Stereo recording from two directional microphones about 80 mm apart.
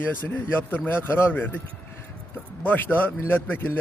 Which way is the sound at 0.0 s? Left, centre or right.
Left.